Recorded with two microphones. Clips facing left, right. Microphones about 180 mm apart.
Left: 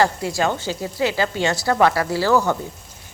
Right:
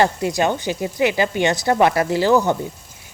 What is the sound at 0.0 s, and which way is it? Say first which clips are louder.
A woman's voice: right 2 dB; 20° right (ahead or behind).